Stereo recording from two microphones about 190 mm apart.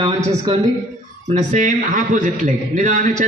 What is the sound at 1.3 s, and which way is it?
A man's voice, 40° right (ahead or behind).